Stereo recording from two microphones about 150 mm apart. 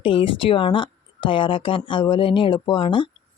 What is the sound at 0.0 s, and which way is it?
Speech, 35° left (ahead or behind).